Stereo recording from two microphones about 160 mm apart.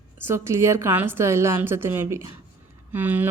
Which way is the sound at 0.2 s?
15° right (ahead or behind).